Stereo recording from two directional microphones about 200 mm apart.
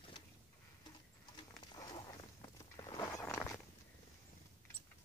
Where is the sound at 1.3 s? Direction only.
20° left (ahead or behind).